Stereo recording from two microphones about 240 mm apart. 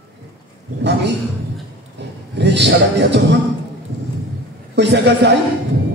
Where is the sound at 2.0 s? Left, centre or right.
Right.